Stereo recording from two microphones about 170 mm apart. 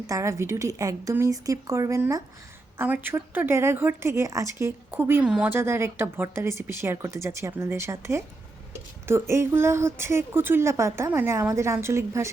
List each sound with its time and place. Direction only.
0.1 s speech: 15° right (ahead or behind)